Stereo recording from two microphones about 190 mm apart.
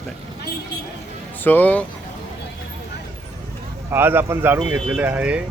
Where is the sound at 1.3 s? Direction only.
10° left (ahead or behind).